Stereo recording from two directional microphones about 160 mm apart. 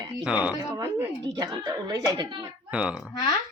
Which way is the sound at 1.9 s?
25° right (ahead or behind).